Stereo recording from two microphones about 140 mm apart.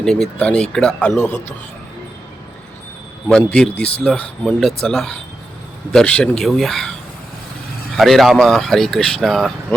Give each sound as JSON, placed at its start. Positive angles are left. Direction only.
{"t": 0.0, "sound": "speech", "side_deg": 5}
{"t": 3.2, "sound": "speech", "side_deg": 5}
{"t": 7.9, "sound": "speech", "side_deg": 0}